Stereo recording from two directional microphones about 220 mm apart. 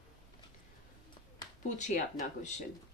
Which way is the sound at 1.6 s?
35° left (ahead or behind).